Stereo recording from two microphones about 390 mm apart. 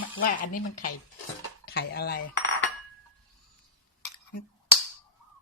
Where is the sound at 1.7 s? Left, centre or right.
Left.